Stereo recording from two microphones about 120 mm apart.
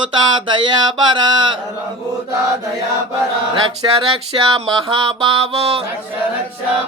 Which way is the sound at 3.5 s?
45° right (ahead or behind).